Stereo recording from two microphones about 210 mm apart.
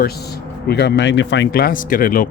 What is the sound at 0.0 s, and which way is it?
Speech, 50° left (ahead or behind).